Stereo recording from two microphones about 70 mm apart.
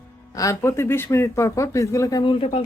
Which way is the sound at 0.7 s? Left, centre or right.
Left.